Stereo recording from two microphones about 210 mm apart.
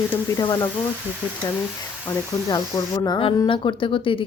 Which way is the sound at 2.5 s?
15° left (ahead or behind).